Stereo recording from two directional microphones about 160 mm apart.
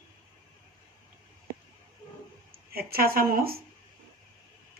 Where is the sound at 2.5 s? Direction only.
70° right (ahead or behind).